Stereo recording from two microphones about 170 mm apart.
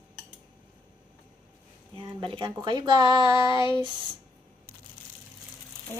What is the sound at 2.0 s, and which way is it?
Speech, 30° right (ahead or behind).